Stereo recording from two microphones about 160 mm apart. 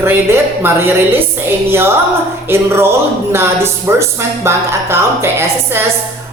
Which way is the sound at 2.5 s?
15° right (ahead or behind).